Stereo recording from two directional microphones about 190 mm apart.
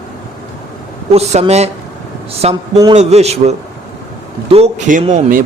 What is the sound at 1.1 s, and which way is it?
A man's voice, 35° right (ahead or behind).